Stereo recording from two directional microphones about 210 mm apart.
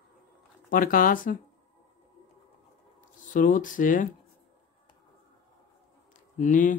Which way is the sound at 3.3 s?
40° left (ahead or behind).